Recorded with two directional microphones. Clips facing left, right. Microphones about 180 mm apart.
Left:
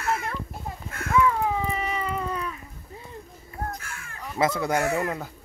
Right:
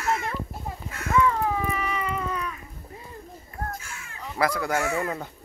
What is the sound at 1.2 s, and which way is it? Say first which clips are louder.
Dog: even; 10° left (ahead or behind).